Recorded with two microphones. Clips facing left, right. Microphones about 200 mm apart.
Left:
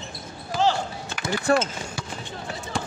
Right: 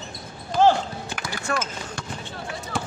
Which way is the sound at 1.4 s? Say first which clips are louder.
Left 7 dB; 35° left (ahead or behind).